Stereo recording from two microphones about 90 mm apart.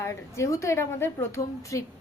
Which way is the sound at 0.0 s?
35° left (ahead or behind).